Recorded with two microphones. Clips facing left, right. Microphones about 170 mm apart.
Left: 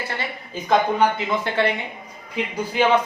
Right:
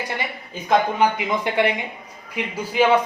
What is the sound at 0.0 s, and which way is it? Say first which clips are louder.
A woman's voice: right 1 dB; 15° right (ahead or behind).